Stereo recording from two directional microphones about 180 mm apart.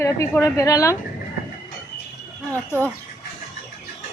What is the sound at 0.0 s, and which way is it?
Speech, 15° left (ahead or behind).